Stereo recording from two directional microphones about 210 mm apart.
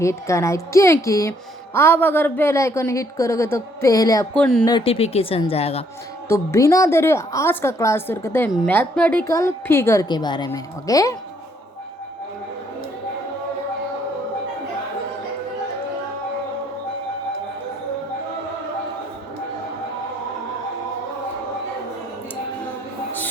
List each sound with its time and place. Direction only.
0.0 s speech: 15° left (ahead or behind)
4.4 s speech: centre (ahead or behind)
4.6 s speech: 20° left (ahead or behind)
6.2 s speech: 15° left (ahead or behind)